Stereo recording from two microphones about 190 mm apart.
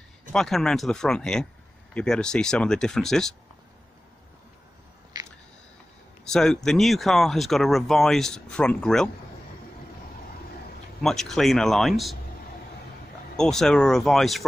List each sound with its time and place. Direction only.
0.3 s speech: centre (ahead or behind)
5.1 s a sound: 20° right (ahead or behind)
6.3 s speech: 5° left (ahead or behind)
11.0 s speech: centre (ahead or behind)
13.4 s speech: 5° left (ahead or behind)